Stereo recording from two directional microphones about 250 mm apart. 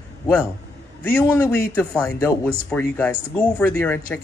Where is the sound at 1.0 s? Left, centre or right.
Centre.